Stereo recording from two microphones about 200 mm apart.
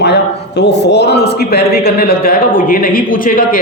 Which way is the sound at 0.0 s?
55° left (ahead or behind).